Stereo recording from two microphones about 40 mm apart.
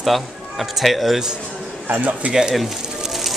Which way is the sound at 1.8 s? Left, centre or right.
Right.